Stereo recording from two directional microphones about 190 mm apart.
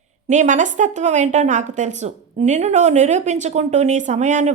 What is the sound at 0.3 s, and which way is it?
A woman's voice, 40° right (ahead or behind).